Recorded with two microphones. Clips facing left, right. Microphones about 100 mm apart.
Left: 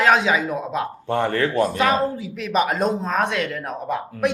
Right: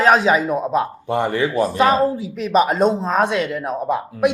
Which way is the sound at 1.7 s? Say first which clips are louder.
Right 4 dB; 30° right (ahead or behind).